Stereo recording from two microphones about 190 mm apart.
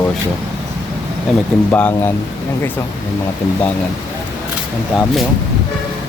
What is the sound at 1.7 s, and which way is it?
Speech, 10° left (ahead or behind).